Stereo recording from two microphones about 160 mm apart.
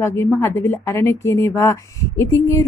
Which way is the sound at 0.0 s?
15° left (ahead or behind).